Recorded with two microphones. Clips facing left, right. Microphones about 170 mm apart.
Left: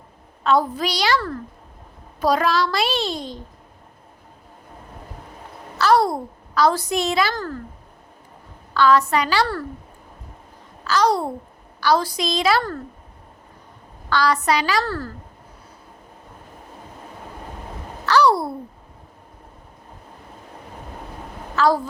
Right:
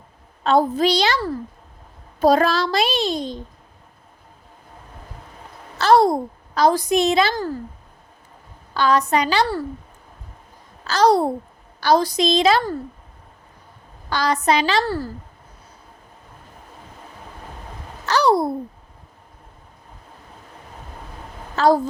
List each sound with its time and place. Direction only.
0.4 s a child's voice: 25° right (ahead or behind)
5.7 s a child's voice: 25° right (ahead or behind)
7.3 s speech: 10° right (ahead or behind)
8.7 s a child's voice: 20° right (ahead or behind)
10.9 s babbling: 35° right (ahead or behind)
11.8 s a child's voice: 20° right (ahead or behind)
14.1 s a child's voice: 20° right (ahead or behind)
18.1 s a child's voice: 20° right (ahead or behind)
21.5 s a woman's voice: 20° right (ahead or behind)